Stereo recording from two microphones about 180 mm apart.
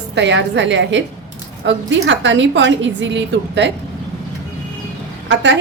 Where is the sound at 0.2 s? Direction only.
80° right.